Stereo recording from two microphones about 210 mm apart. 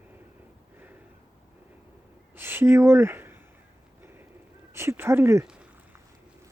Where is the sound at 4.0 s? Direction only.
10° right (ahead or behind).